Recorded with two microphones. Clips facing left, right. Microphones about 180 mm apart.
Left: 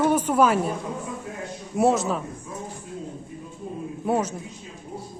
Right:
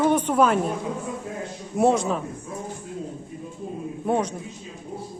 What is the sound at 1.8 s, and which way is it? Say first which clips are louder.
Speech: right 1 dB; centre (ahead or behind).